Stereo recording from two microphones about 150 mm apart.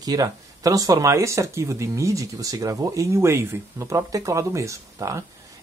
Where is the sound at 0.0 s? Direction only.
25° right (ahead or behind).